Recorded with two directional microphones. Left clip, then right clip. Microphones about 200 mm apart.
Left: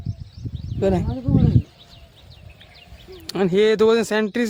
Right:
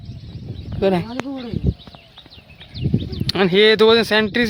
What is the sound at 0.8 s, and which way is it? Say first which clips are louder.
Speech: right 3 dB; 5° right (ahead or behind).